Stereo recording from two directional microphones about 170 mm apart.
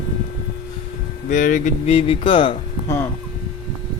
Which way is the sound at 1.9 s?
35° left (ahead or behind).